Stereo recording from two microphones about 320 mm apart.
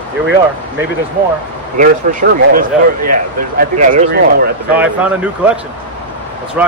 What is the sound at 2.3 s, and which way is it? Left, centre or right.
Speech, right.